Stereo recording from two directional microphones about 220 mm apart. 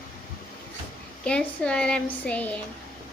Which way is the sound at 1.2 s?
5° left (ahead or behind).